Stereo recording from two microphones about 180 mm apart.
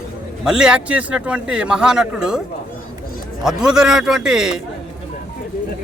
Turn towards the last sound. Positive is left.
turn(degrees=-5)  # may be behind; listen again after turning